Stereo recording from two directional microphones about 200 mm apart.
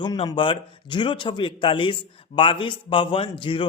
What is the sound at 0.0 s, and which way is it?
A man's voice, 20° left (ahead or behind).